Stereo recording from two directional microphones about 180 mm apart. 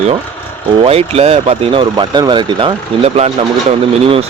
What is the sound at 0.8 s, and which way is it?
Speech, 35° right (ahead or behind).